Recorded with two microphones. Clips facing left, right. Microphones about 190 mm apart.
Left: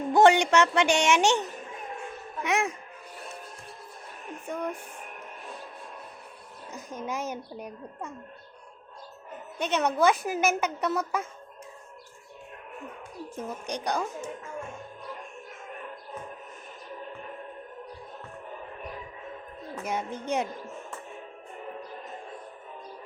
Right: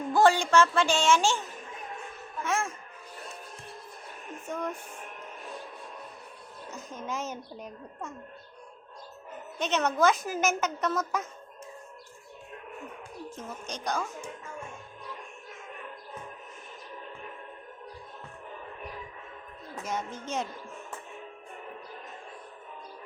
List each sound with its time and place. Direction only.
0.1 s a woman's voice: 20° left (ahead or behind)
2.4 s a woman's voice: 15° left (ahead or behind)
4.4 s speech: 10° left (ahead or behind)
6.7 s a woman's voice: 10° left (ahead or behind)
9.6 s a woman's voice: 10° left (ahead or behind)
13.3 s a woman's voice: 15° left (ahead or behind)
19.8 s a woman's voice: 15° left (ahead or behind)
20.1 s speech: 60° left (ahead or behind)